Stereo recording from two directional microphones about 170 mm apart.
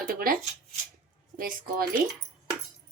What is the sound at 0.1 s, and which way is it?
Shuffling cards, 60° right (ahead or behind).